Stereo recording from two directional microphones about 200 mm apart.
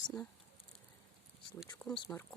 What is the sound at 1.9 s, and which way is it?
Speech, 15° left (ahead or behind).